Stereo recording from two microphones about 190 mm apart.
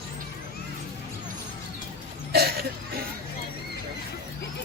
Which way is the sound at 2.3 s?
55° right (ahead or behind).